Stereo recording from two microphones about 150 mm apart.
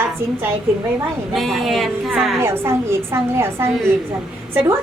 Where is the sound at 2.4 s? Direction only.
15° right (ahead or behind).